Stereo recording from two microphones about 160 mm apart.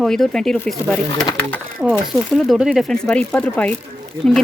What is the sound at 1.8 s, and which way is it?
Speech, 15° right (ahead or behind).